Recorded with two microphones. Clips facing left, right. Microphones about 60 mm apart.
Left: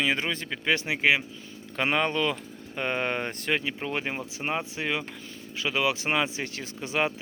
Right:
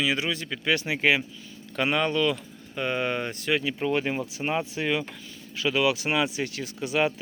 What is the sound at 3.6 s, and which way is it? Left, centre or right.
Speech, centre.